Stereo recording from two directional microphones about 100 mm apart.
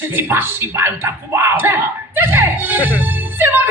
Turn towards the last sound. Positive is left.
turn(degrees=-20)  # may be behind; listen again after turning